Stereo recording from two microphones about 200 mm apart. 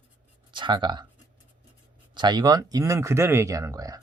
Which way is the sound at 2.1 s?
20° right (ahead or behind).